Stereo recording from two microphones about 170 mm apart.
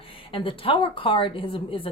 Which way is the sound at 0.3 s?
30° left (ahead or behind).